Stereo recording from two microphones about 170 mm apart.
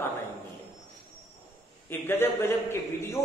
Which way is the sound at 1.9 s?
15° left (ahead or behind).